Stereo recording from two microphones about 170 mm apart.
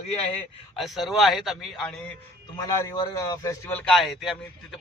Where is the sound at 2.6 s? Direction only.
20° left (ahead or behind).